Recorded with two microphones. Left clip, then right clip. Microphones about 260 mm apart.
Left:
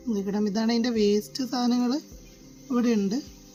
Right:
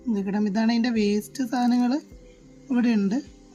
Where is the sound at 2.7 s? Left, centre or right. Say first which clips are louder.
Right 1 dB; centre.